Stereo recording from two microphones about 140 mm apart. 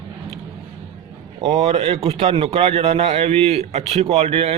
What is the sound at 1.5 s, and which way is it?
A man's voice, 45° right (ahead or behind).